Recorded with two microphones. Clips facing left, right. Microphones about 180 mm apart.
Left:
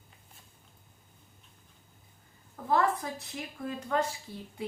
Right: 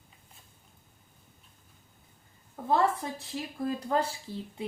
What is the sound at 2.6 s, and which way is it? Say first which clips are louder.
A woman's voice: right 1 dB; 25° right (ahead or behind).